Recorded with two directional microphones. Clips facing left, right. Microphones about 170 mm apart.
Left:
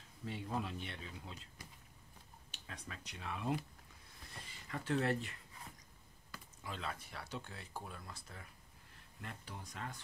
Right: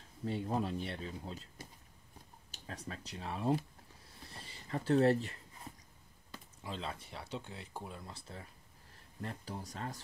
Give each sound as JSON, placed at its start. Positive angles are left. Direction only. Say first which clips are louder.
{"t": 0.2, "sound": "speech", "louder": "right 6 dB", "side_deg": -40}
{"t": 4.2, "sound": "a sound", "louder": "right 3 dB", "side_deg": -30}
{"t": 6.3, "sound": "speech", "louder": "right 4 dB", "side_deg": -25}